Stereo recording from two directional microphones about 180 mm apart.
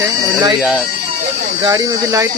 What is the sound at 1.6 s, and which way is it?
Speech, 20° right (ahead or behind).